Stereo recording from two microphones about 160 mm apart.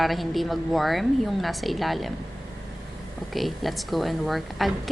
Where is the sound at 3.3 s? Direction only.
Centre (ahead or behind).